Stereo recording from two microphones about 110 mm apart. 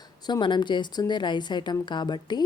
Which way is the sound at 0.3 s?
45° left (ahead or behind).